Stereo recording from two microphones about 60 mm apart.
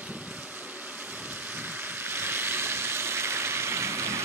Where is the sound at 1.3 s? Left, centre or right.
Right.